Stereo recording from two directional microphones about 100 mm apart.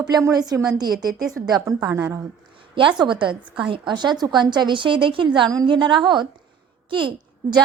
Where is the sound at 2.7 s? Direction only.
55° right (ahead or behind).